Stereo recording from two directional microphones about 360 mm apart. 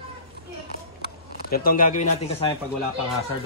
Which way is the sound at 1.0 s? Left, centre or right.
Left.